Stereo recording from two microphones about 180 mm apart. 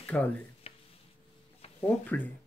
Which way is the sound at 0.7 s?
30° left (ahead or behind).